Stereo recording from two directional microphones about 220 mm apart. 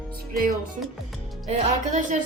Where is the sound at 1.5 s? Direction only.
35° right (ahead or behind).